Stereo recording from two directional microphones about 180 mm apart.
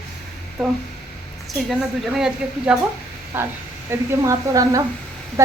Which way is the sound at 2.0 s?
5° right (ahead or behind).